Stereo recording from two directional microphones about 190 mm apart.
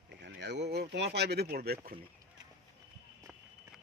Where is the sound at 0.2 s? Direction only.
65° right (ahead or behind).